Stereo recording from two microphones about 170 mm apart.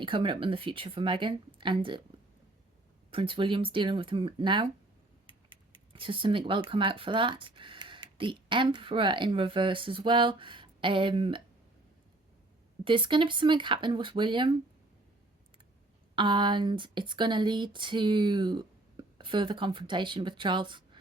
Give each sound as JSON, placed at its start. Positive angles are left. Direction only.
{"t": 0.0, "sound": "speech", "side_deg": -30}
{"t": 3.1, "sound": "speech", "side_deg": -30}
{"t": 12.8, "sound": "speech", "side_deg": -30}
{"t": 16.1, "sound": "speech", "side_deg": -25}